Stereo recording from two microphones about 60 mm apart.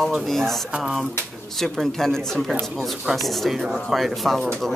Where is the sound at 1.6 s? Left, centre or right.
Centre.